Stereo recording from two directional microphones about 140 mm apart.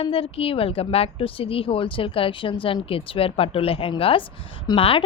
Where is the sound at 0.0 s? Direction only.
45° left (ahead or behind).